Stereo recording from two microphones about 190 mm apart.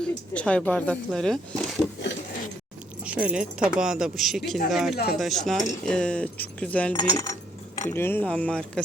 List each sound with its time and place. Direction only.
0.0 s speech: 5° left (ahead or behind)
3.0 s speech: 5° right (ahead or behind)
6.9 s speech: 20° left (ahead or behind)